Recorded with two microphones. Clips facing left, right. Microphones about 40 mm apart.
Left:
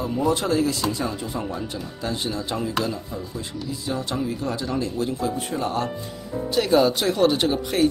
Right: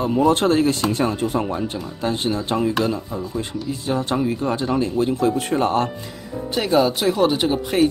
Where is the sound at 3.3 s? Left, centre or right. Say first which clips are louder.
Right 5 dB; right.